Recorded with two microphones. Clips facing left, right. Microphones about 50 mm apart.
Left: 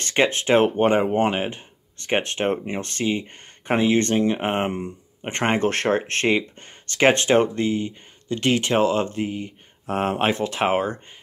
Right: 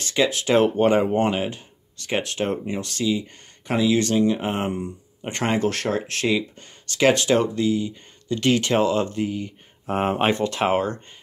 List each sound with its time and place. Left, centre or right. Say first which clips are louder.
0.0 s speech: left 1 dB; left
8.3 s speech: right 1 dB; centre
9.8 s speech: right 1 dB; centre